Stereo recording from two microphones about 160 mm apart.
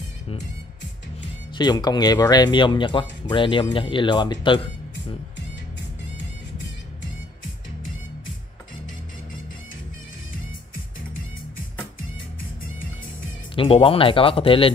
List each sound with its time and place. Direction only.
1.6 s speech: 25° left (ahead or behind)
13.6 s speech: 35° left (ahead or behind)